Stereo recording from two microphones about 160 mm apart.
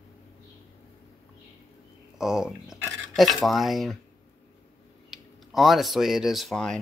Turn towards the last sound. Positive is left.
turn(degrees=0)  # may be behind; listen again after turning